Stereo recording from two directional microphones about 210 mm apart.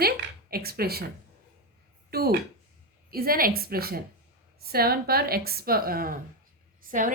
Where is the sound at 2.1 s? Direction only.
45° right (ahead or behind).